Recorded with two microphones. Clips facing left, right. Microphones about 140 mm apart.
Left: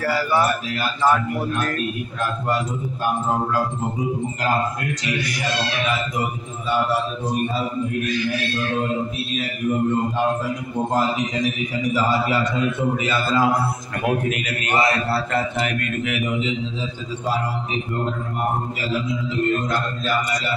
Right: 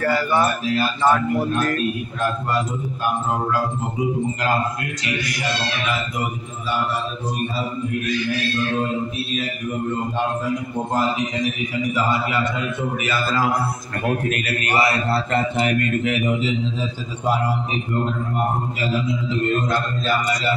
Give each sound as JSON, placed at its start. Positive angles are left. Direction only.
{"t": 0.0, "sound": "a man's voice", "side_deg": 5}
{"t": 13.0, "sound": "a man's voice", "side_deg": 25}
{"t": 16.1, "sound": "a man's voice", "side_deg": -40}